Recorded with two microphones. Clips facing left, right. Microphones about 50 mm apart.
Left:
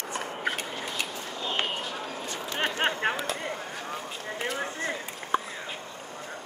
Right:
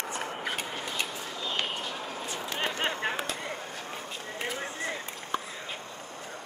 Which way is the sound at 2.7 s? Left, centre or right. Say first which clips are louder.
Left 6 dB; left.